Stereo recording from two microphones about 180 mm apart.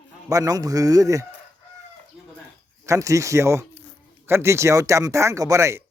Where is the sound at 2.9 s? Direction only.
15° right (ahead or behind).